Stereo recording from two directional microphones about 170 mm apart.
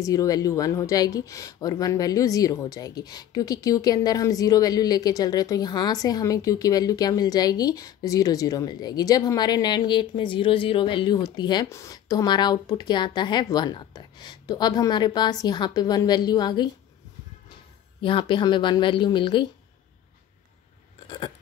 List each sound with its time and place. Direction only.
0.0 s speech: 20° left (ahead or behind)
18.0 s speech: 30° left (ahead or behind)